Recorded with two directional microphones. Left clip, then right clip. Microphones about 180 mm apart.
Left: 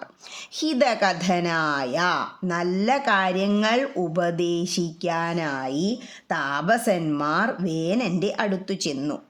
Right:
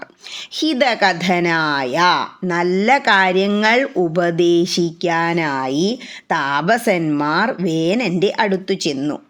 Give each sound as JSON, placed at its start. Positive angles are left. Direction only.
{"t": 0.6, "sound": "speech", "side_deg": -15}